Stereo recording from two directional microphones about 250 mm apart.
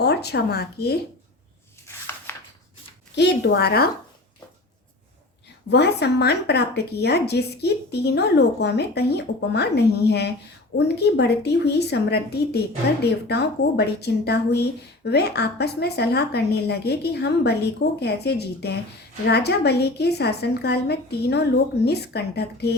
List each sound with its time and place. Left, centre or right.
0.0 s speech: left
2.3 s a sound: centre
3.2 s a woman's voice: left
5.6 s a woman's voice: left